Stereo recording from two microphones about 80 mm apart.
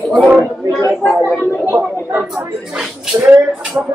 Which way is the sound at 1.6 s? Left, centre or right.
Right.